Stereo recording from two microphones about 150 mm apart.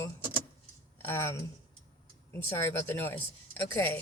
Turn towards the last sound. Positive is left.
turn(degrees=10)  # may be behind; listen again after turning